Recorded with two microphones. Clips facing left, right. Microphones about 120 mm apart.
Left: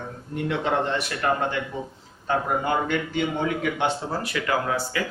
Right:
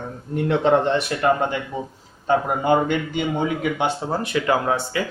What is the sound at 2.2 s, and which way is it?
Speech, 20° right (ahead or behind).